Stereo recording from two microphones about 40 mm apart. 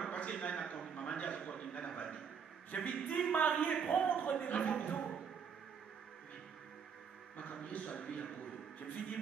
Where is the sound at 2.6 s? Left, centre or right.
Left.